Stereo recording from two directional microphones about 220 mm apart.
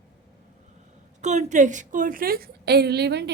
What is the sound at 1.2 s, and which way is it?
A woman's voice, 35° right (ahead or behind).